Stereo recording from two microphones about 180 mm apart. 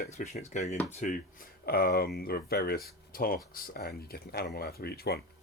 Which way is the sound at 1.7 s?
60° left (ahead or behind).